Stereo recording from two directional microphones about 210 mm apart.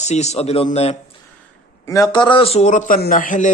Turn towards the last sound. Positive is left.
turn(degrees=40)  # may be behind; listen again after turning